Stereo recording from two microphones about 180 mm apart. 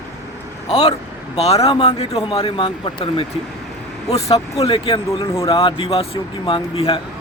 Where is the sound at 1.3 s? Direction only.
35° left (ahead or behind).